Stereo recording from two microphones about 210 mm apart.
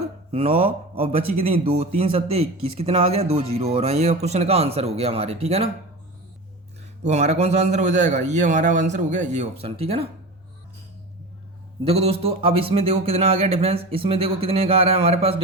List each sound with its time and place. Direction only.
0.3 s a man's voice: 30° right (ahead or behind)
7.0 s a man's voice: 35° right (ahead or behind)
11.9 s a man's voice: 30° right (ahead or behind)